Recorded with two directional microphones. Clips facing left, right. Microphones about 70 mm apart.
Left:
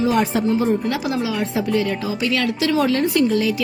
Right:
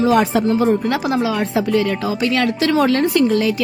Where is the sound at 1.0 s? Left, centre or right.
Right.